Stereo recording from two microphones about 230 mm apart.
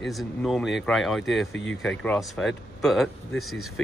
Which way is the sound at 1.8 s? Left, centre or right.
Centre.